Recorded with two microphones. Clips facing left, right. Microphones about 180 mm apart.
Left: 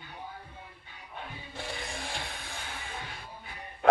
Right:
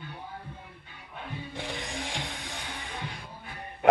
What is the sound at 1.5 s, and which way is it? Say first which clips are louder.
Music: right 1 dB; 20° right (ahead or behind).